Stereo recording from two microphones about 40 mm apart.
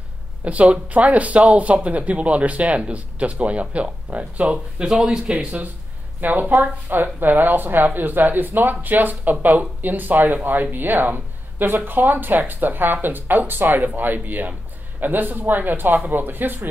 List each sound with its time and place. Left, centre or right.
0.5 s speech: right
4.8 s speech: centre
6.2 s speech: right